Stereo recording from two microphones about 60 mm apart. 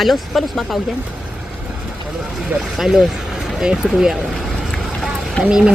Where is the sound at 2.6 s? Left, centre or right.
Centre.